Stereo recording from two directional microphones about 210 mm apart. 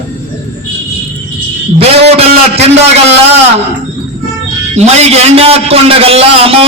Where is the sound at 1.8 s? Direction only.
30° right (ahead or behind).